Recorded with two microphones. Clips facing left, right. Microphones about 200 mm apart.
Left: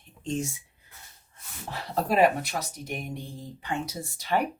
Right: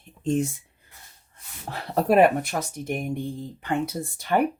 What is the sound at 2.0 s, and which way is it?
Speech, 55° right (ahead or behind).